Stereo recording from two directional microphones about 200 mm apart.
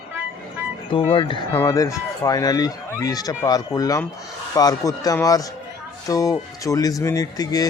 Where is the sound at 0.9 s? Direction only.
25° left (ahead or behind).